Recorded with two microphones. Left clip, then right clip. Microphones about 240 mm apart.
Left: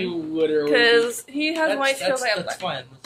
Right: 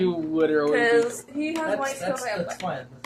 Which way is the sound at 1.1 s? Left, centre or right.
Left.